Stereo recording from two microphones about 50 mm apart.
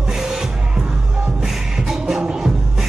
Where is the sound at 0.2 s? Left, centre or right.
Centre.